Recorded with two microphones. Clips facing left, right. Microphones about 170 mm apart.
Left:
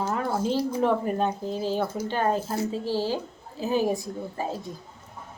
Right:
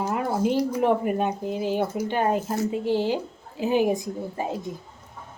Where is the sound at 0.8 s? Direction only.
10° right (ahead or behind).